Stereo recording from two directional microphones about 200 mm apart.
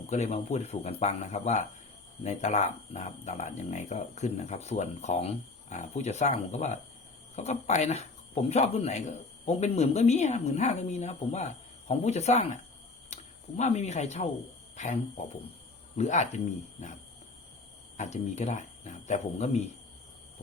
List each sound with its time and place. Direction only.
0.1 s speech: 35° left (ahead or behind)
13.6 s speech: 35° left (ahead or behind)
17.9 s speech: 35° left (ahead or behind)